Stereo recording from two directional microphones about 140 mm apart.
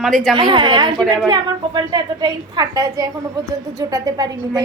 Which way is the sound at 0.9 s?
Centre (ahead or behind).